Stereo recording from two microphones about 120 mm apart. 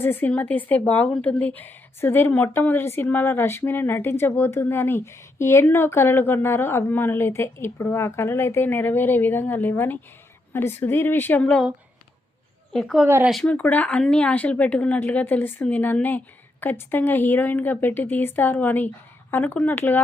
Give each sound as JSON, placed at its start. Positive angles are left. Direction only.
{"t": 0.0, "sound": "a woman's voice", "side_deg": 15}
{"t": 12.7, "sound": "a woman's voice", "side_deg": 5}